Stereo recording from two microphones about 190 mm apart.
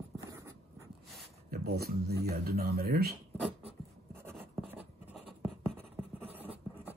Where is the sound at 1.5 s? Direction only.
55° right (ahead or behind).